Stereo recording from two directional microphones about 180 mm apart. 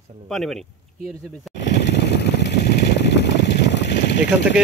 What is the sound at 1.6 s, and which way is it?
Vehicle, 70° left (ahead or behind).